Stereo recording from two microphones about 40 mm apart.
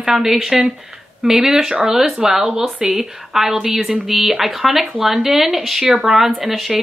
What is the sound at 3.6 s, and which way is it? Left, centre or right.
Speech, right.